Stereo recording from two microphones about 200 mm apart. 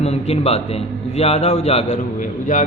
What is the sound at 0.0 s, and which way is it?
A man's voice, 30° left (ahead or behind).